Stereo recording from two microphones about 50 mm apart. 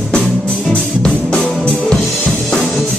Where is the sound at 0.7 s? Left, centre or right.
Centre.